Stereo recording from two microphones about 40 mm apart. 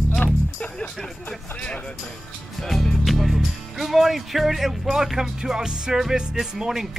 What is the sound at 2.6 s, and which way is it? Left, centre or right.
Music, centre.